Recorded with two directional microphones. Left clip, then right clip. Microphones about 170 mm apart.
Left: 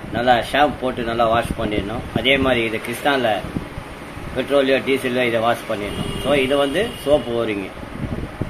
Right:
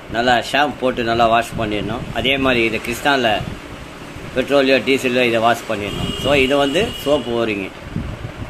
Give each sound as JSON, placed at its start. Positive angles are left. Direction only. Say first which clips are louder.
{"t": 0.1, "sound": "speech", "louder": "right 1 dB", "side_deg": -30}
{"t": 4.4, "sound": "speech", "louder": "right 3 dB", "side_deg": -35}